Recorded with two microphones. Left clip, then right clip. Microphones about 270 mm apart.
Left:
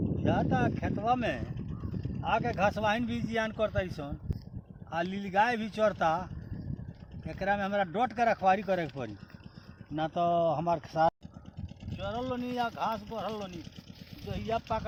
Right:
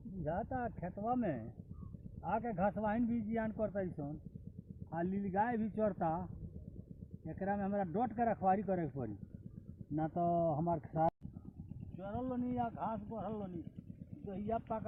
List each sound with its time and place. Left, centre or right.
0.3 s a man's voice: centre
7.3 s a man's voice: centre